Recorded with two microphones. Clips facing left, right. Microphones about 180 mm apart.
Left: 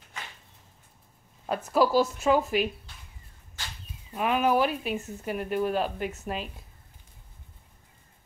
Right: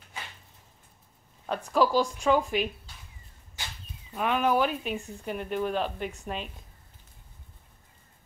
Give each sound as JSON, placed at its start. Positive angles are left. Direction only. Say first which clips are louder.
{"t": 1.4, "sound": "speech", "louder": "left 1 dB", "side_deg": 10}
{"t": 4.1, "sound": "speech", "louder": "left 1 dB", "side_deg": 5}